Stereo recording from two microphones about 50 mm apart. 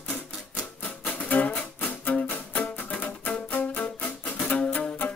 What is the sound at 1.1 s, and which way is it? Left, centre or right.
Music, left.